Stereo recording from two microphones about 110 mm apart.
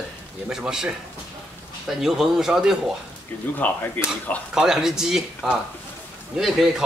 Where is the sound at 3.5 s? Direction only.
15° left (ahead or behind).